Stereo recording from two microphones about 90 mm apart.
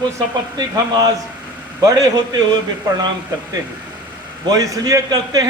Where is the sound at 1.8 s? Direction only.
45° right (ahead or behind).